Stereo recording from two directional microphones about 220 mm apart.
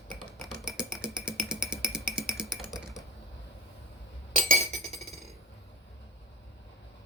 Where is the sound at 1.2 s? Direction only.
5° right (ahead or behind).